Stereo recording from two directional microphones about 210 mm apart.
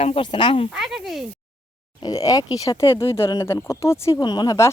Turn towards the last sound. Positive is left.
turn(degrees=15)  # may be behind; listen again after turning